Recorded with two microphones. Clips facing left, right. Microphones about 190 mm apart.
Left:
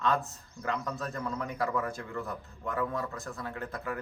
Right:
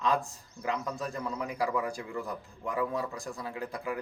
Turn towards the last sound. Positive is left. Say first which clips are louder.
# right 1 dB
turn(degrees=-10)  # may be behind; listen again after turning